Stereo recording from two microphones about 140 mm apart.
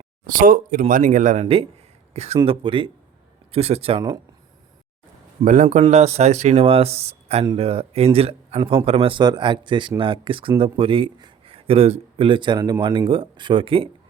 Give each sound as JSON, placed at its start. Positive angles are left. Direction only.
{"t": 0.3, "sound": "speech", "side_deg": -75}
{"t": 2.1, "sound": "speech", "side_deg": -50}
{"t": 2.4, "sound": "speech", "side_deg": -35}
{"t": 5.6, "sound": "speech", "side_deg": -45}